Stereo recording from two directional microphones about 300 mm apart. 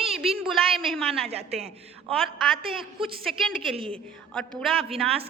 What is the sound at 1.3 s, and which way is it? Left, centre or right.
Speech, right.